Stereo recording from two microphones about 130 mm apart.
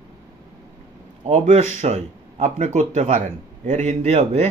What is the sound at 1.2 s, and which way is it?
Speech, 60° right (ahead or behind).